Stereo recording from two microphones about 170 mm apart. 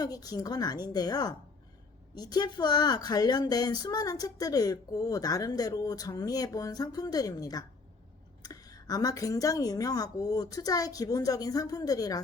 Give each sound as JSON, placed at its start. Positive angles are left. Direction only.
{"t": 0.0, "sound": "speech", "side_deg": 20}